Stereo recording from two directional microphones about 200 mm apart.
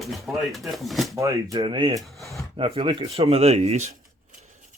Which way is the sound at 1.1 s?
20° right (ahead or behind).